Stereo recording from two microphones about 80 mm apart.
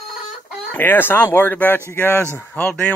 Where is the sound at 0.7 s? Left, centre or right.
Left.